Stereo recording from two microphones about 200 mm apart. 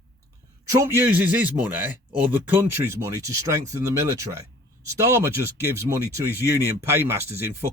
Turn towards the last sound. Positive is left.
turn(degrees=-10)  # may be behind; listen again after turning